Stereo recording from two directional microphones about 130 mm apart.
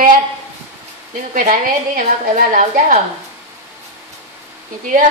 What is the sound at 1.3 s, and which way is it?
A woman's voice, 90° right.